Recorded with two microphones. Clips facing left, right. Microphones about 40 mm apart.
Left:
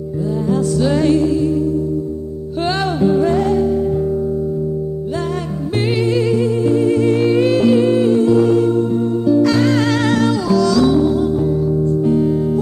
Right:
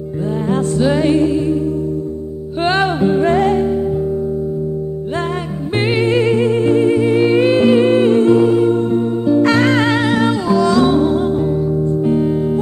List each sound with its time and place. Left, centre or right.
0.7 s music: right
2.6 s music: right
5.8 s music: right
6.9 s music: centre; by 8.4 s right
8.5 s music: centre
8.7 s music: right
9.8 s music: centre